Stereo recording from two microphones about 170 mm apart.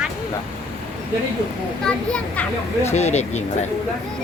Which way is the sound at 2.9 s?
40° left (ahead or behind).